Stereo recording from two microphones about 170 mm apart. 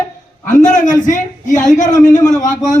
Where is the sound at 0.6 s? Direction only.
50° left (ahead or behind).